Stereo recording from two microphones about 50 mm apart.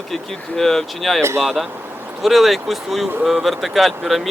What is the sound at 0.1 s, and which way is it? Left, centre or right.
Speech, centre.